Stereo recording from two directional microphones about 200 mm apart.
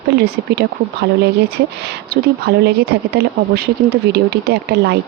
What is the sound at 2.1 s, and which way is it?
Speech, 55° right (ahead or behind).